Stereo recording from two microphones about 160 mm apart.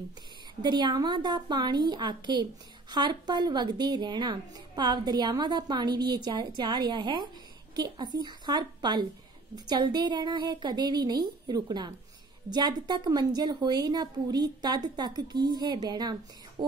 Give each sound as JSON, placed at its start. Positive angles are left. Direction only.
{"t": 0.6, "sound": "a woman's voice", "side_deg": -25}